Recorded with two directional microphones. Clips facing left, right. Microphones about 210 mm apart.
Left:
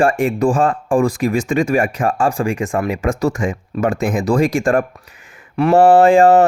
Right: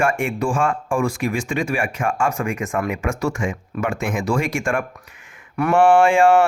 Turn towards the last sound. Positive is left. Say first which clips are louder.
# left 4 dB
turn(degrees=35)  # may be behind; listen again after turning